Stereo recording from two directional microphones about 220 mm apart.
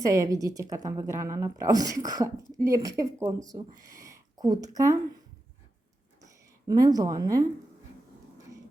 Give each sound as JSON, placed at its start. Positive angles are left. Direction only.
{"t": 0.0, "sound": "a woman's voice", "side_deg": -15}
{"t": 3.8, "sound": "a sound", "side_deg": -15}
{"t": 6.7, "sound": "a woman's voice", "side_deg": -15}